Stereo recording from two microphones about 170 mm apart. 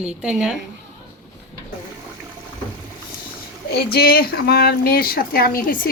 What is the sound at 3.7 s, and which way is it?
Speech, 65° left (ahead or behind).